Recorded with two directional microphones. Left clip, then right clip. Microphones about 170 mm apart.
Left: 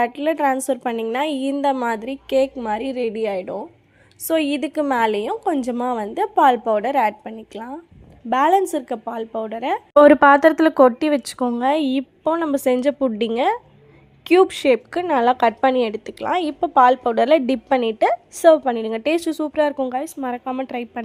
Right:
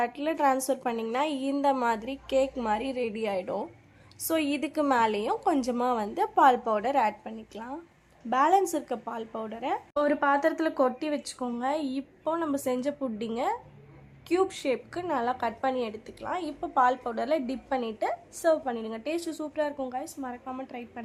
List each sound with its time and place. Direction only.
0.0 s a woman's voice: 20° left (ahead or behind); by 21.0 s 40° left (ahead or behind)